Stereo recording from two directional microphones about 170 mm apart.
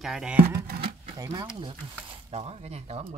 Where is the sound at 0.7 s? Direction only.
35° right (ahead or behind).